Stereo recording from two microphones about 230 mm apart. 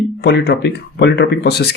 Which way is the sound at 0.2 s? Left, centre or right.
Left.